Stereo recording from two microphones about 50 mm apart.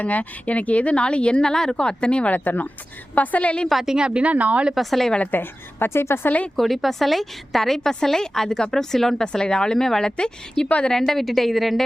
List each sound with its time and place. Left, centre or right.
0.0 s speech: left
2.4 s speech: left
3.2 s speech: left
3.7 s a woman's voice: centre
3.9 s speech: centre
4.7 s a woman's voice: centre
5.3 s a woman's voice: left
6.6 s a woman's voice: centre; by 10.9 s left
10.9 s a woman's voice: centre